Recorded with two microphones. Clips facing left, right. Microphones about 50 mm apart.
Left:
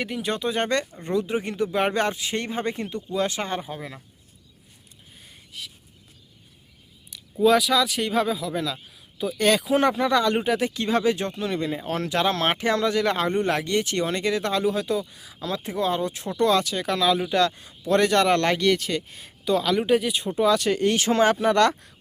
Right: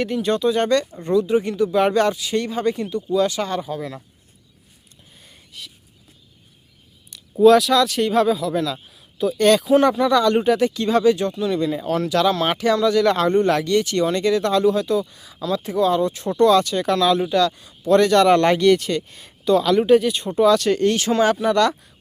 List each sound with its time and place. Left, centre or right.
0.0 s speech: centre
3.8 s speech: centre
5.2 s a sound: centre
7.1 s a sound: centre
7.4 s a man's voice: centre
9.6 s speech: left
13.0 s speech: centre
15.2 s speech: centre
15.4 s speech: left
16.4 s speech: centre
17.3 s speech: left
18.3 s a man's voice: centre
21.0 s speech: left